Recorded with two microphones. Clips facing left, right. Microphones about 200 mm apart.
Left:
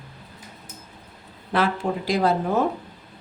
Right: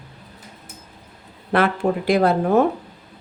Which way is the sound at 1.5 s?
60° right (ahead or behind).